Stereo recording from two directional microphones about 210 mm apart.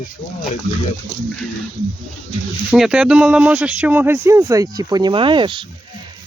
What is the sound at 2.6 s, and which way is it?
Speech, 5° right (ahead or behind).